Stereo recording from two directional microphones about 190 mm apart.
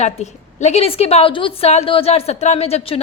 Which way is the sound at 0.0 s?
35° left (ahead or behind).